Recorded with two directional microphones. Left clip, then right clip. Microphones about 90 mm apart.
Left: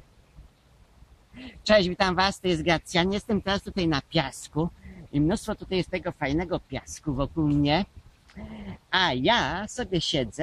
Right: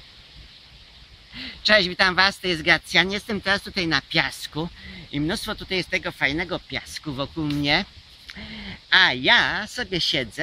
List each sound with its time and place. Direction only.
1.4 s speech: 10° right (ahead or behind)